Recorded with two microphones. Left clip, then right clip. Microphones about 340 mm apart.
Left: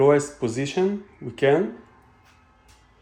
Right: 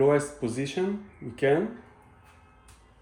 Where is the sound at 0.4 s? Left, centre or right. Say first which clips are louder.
Left 5 dB; left.